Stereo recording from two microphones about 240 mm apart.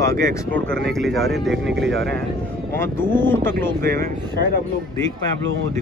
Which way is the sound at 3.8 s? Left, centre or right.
Right.